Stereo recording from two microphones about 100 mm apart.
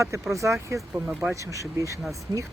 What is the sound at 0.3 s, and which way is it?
Speech, 30° right (ahead or behind).